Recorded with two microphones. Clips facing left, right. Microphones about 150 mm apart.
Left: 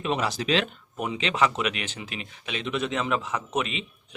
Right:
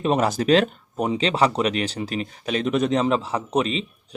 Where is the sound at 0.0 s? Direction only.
45° right (ahead or behind).